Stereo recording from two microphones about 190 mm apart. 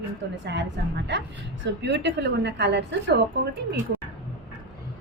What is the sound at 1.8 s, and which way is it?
A woman's voice, 65° right (ahead or behind).